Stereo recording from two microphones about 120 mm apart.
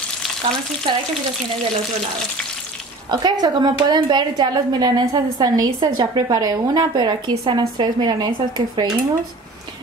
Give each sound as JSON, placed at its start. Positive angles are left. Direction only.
{"t": 0.9, "sound": "frying", "side_deg": -45}
{"t": 3.1, "sound": "a woman's voice", "side_deg": -35}